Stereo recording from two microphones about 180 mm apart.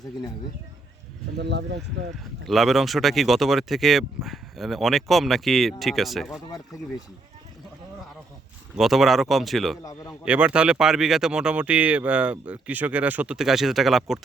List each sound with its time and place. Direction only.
1.4 s speech: 75° right (ahead or behind)
2.5 s speech: centre (ahead or behind)
8.7 s speech: centre (ahead or behind)
9.8 s a man's voice: 20° left (ahead or behind)
10.2 s speech: 5° right (ahead or behind)